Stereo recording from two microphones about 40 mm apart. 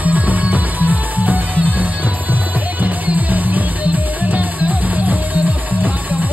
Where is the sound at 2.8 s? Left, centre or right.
Right.